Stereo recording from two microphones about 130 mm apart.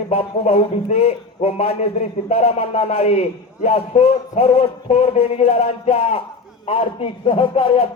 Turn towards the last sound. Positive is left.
turn(degrees=40)  # may be behind; listen again after turning